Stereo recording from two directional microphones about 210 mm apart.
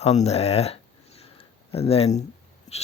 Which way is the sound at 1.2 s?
30° left (ahead or behind).